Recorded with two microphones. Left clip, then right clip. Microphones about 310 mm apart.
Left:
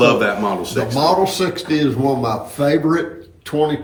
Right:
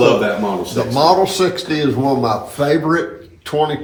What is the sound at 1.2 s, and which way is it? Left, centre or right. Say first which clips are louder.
Speech: right 2 dB; centre.